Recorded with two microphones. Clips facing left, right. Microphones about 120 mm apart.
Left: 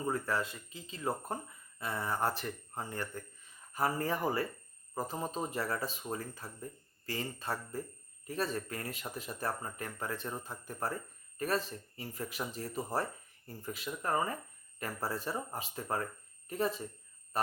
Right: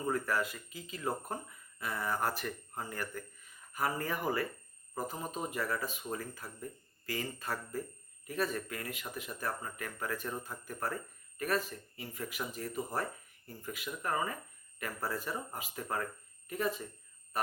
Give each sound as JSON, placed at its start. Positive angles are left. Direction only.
{"t": 0.1, "sound": "speech", "side_deg": 25}